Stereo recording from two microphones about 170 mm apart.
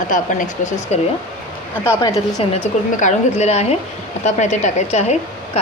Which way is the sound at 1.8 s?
20° left (ahead or behind).